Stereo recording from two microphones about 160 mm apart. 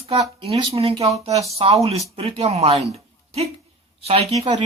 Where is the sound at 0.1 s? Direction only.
40° right (ahead or behind).